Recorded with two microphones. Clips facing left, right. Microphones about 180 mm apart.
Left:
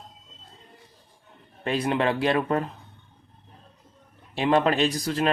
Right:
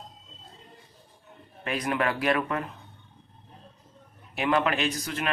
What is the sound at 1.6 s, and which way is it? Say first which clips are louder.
Speech: left 4 dB; 30° left (ahead or behind).